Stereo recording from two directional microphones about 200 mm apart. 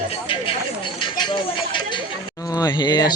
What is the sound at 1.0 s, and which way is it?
Chatter, 25° left (ahead or behind).